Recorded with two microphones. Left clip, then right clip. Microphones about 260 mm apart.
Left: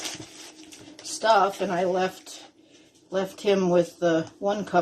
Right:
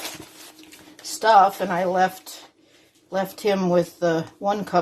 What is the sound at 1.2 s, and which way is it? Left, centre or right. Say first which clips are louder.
Speech: right 5 dB; right.